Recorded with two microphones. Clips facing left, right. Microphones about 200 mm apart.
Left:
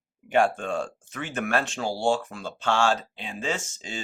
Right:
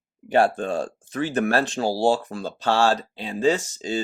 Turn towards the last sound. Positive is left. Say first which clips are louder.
# right 9 dB
turn(degrees=-35)  # may be behind; listen again after turning